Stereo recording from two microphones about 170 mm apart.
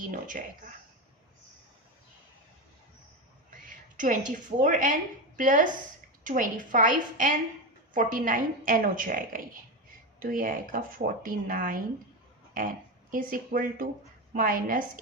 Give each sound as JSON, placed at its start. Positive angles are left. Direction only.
{"t": 0.1, "sound": "a woman's voice", "side_deg": -50}
{"t": 3.5, "sound": "a woman's voice", "side_deg": -50}